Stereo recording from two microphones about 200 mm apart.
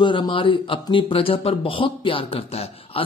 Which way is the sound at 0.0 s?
25° left (ahead or behind).